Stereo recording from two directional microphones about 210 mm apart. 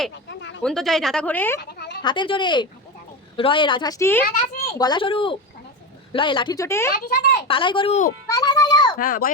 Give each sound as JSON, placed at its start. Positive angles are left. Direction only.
{"t": 0.1, "sound": "a sound", "side_deg": 60}
{"t": 0.6, "sound": "speech", "side_deg": 0}
{"t": 1.5, "sound": "a sound", "side_deg": 50}
{"t": 2.0, "sound": "a woman's voice", "side_deg": 20}
{"t": 6.9, "sound": "speech", "side_deg": 50}
{"t": 7.4, "sound": "a woman's voice", "side_deg": 25}
{"t": 8.3, "sound": "music", "side_deg": 15}
{"t": 9.0, "sound": "speech", "side_deg": 45}